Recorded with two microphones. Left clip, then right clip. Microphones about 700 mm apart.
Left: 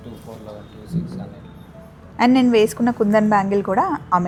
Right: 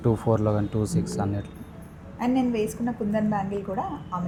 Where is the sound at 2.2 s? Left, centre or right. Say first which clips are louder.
Left 10 dB; left.